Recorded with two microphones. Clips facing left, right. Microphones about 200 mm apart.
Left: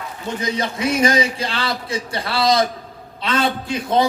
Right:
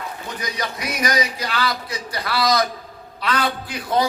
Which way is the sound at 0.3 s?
25° left (ahead or behind).